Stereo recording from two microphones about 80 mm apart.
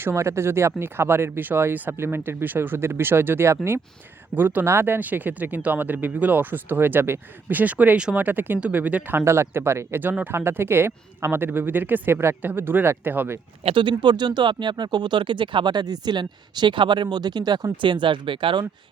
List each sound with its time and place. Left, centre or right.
0.0 s speech: right
13.7 s speech: right